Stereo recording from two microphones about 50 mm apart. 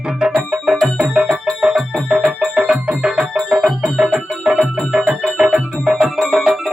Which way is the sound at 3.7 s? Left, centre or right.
Centre.